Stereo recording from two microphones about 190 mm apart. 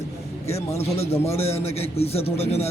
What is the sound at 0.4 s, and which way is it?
Speech, 35° left (ahead or behind).